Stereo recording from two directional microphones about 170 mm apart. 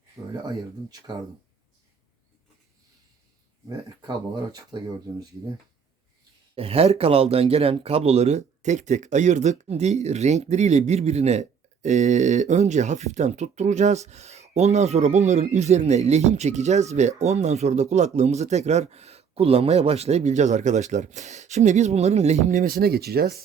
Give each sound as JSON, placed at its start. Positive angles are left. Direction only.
{"t": 0.2, "sound": "speech", "side_deg": -20}
{"t": 3.7, "sound": "speech", "side_deg": -20}
{"t": 6.6, "sound": "speech", "side_deg": -35}